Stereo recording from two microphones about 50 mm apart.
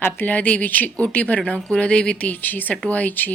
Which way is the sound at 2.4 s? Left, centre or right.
Left.